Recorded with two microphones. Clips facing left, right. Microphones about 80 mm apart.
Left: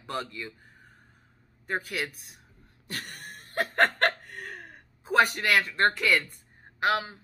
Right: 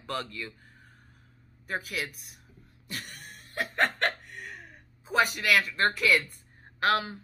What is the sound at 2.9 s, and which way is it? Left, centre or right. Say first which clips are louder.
Chuckle: left 2 dB; left.